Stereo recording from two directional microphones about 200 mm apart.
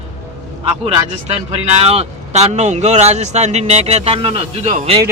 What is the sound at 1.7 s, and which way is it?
Speech, 30° right (ahead or behind).